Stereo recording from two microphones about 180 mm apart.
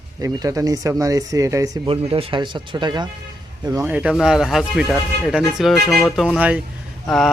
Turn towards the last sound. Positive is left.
turn(degrees=0)  # may be behind; listen again after turning